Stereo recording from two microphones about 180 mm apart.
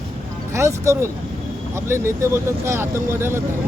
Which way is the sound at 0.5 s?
15° right (ahead or behind).